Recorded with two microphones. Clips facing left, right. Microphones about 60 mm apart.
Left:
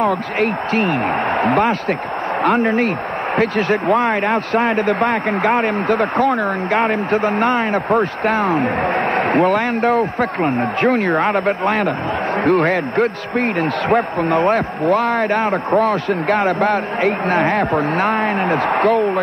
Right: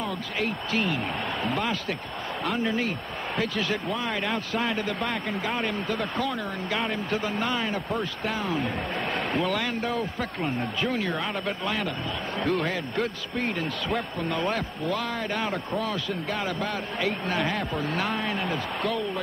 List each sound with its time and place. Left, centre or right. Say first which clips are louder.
0.0 s a man's voice: left 12 dB; left